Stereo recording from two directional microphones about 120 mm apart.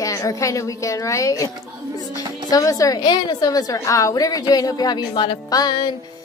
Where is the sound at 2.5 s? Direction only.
30° left (ahead or behind).